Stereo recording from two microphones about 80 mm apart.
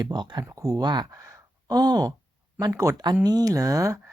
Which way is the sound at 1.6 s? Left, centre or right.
Right.